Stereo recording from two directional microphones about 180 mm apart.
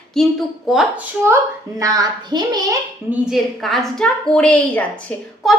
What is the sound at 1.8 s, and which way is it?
Speech, 20° right (ahead or behind).